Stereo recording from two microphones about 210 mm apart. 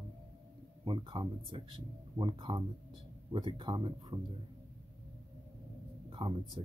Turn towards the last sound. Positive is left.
turn(degrees=-25)  # may be behind; listen again after turning